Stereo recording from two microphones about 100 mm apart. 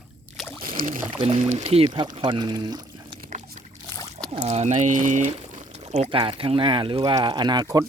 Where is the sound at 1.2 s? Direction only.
75° right (ahead or behind).